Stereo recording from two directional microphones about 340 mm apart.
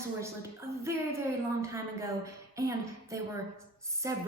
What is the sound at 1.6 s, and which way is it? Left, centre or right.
A woman's voice, centre.